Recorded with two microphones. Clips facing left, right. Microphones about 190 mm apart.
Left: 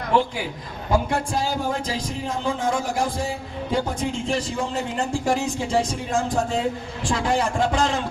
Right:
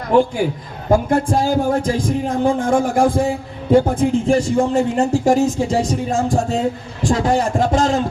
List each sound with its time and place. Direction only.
0.1 s a man's voice: 45° right (ahead or behind)